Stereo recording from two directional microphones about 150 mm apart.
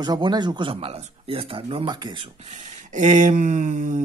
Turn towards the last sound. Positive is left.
turn(degrees=-55)  # may be behind; listen again after turning